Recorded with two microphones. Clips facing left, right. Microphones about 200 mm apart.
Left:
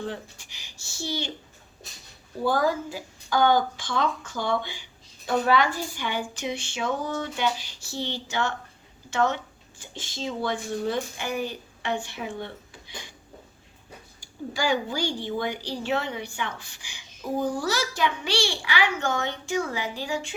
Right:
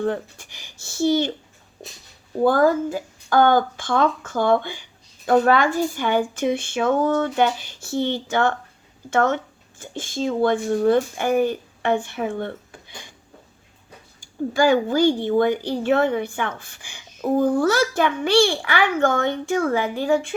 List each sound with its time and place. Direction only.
0.0 s speech: 55° right (ahead or behind)
2.4 s speech: 50° right (ahead or behind)
14.2 s speech: 50° right (ahead or behind)